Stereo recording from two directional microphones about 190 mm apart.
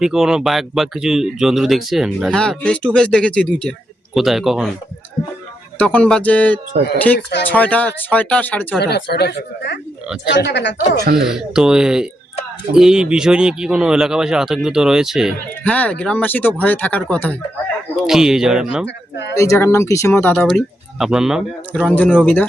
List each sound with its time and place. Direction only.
0.0 s speech: centre (ahead or behind)
5.8 s speech: 5° left (ahead or behind)
8.8 s a woman's voice: 60° left (ahead or behind)
10.9 s speech: 50° right (ahead or behind)
11.2 s speech: 5° right (ahead or behind)
18.0 s speech: 5° right (ahead or behind)
19.4 s speech: 15° left (ahead or behind)
21.0 s speech: 5° right (ahead or behind)